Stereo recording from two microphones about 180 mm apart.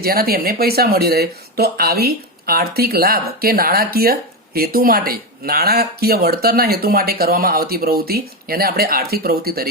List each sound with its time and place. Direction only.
0.0 s speech: 55° right (ahead or behind)